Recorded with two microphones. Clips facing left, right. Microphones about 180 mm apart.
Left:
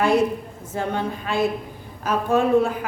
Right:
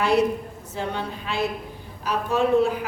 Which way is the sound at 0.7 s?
50° left (ahead or behind).